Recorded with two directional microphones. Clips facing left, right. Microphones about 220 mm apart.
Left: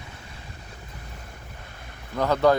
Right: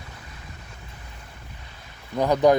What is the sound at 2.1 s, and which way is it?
Speech, 15° right (ahead or behind).